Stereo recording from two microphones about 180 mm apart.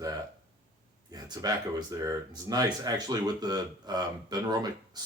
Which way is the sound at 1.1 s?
20° right (ahead or behind).